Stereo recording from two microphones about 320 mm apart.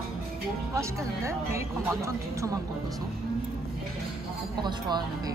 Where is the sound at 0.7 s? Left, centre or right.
Centre.